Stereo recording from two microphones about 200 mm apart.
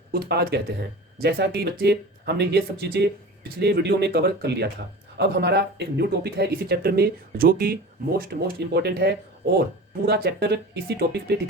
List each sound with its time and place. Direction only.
0.1 s speech: 55° right (ahead or behind)